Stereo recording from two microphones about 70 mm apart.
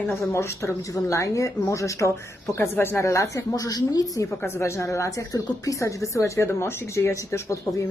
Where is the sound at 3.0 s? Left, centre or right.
Left.